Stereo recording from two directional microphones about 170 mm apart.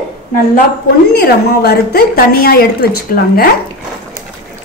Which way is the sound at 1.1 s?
65° left (ahead or behind).